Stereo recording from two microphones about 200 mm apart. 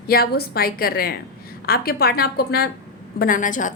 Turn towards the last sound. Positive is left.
turn(degrees=40)  # may be behind; listen again after turning